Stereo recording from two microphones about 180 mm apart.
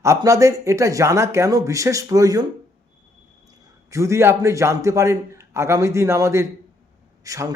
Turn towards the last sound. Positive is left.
turn(degrees=-20)  # may be behind; listen again after turning